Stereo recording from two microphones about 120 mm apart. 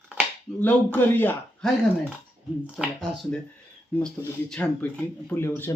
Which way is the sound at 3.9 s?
5° left (ahead or behind).